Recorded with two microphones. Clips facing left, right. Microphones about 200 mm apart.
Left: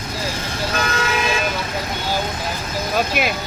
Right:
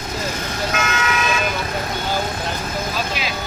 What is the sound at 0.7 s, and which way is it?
Toot, 35° left (ahead or behind).